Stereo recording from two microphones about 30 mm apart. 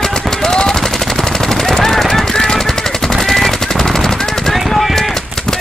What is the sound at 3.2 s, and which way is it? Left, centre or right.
Machine gun, centre.